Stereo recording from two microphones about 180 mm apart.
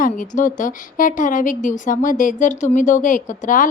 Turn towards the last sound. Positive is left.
turn(degrees=45)  # may be behind; listen again after turning